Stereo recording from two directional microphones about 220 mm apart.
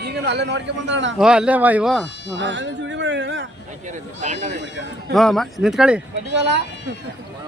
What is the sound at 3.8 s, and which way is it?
Speech, 35° right (ahead or behind).